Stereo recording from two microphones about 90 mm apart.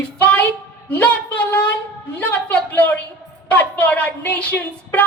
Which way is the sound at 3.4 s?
20° left (ahead or behind).